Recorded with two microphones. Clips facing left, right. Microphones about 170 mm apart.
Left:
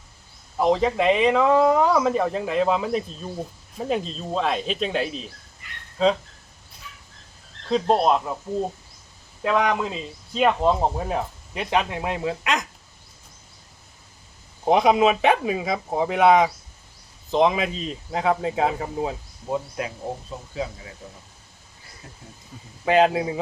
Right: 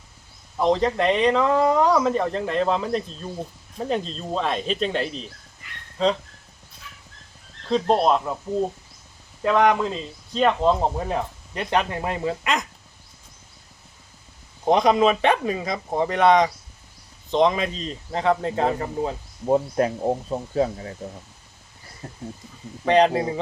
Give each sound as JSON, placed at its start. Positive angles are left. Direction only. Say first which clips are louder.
{"t": 0.6, "sound": "speech", "louder": "even", "side_deg": 5}
{"t": 7.7, "sound": "speech", "louder": "even", "side_deg": 5}
{"t": 9.4, "sound": "speech", "louder": "right 3 dB", "side_deg": 0}
{"t": 14.6, "sound": "speech", "louder": "even", "side_deg": 5}
{"t": 19.5, "sound": "speech", "louder": "right 8 dB", "side_deg": -40}
{"t": 22.0, "sound": "speech", "louder": "right 8 dB", "side_deg": -45}
{"t": 22.9, "sound": "speech", "louder": "right 1 dB", "side_deg": 5}